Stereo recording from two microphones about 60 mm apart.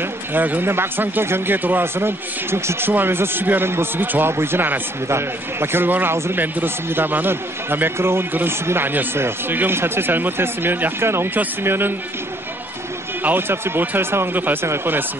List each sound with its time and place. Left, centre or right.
0.0 s speech: right
6.1 s speech: right
6.4 s speech: right
13.2 s speech: right